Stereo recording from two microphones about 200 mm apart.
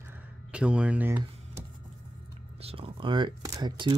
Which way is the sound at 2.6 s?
30° right (ahead or behind).